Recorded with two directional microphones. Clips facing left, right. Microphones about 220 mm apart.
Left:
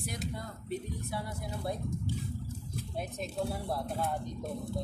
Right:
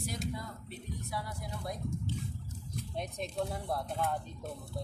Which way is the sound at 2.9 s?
5° left (ahead or behind).